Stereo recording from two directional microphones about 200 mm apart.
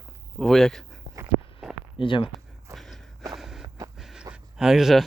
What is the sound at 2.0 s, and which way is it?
Speech, 25° left (ahead or behind).